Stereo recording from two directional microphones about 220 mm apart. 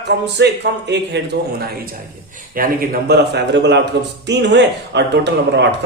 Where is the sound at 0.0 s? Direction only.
50° right (ahead or behind).